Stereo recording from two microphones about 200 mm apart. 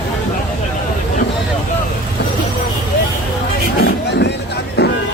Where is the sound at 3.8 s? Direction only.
60° left (ahead or behind).